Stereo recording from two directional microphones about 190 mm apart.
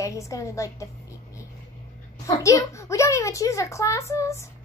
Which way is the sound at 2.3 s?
15° left (ahead or behind).